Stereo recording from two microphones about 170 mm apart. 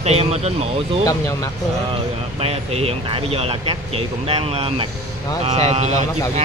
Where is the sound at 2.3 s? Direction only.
35° right (ahead or behind).